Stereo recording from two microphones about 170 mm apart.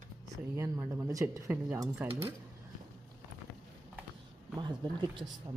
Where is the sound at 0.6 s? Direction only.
15° right (ahead or behind).